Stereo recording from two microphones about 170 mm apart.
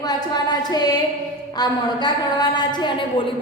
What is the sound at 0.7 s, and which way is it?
A woman's voice, 25° left (ahead or behind).